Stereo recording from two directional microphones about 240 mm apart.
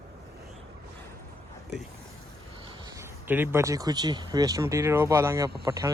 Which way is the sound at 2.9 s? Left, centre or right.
Centre.